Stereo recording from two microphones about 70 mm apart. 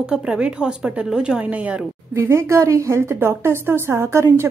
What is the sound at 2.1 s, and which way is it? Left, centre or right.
A woman's voice, right.